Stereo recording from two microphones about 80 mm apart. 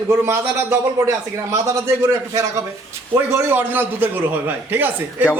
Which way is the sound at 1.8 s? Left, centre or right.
Right.